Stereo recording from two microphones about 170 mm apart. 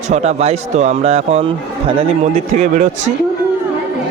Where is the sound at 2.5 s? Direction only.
45° right (ahead or behind).